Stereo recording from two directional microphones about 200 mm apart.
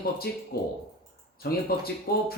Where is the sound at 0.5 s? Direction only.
50° left (ahead or behind).